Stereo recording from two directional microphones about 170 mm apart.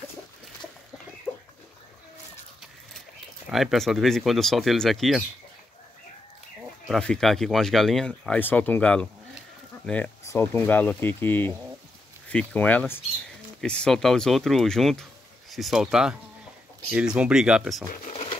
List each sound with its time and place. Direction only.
3.4 s speech: centre (ahead or behind)
6.9 s speech: 5° left (ahead or behind)
18.0 s a sound: 35° left (ahead or behind)